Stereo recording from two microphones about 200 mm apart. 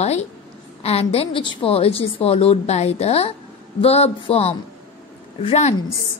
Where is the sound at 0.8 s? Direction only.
30° left (ahead or behind).